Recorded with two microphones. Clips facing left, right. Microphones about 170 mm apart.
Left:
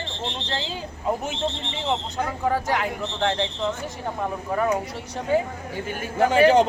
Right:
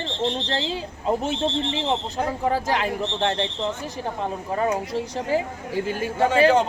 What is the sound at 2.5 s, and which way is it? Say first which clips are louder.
Speech: right 1 dB; 25° right (ahead or behind).